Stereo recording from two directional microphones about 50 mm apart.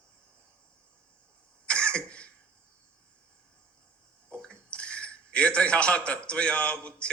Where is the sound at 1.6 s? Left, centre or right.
Left.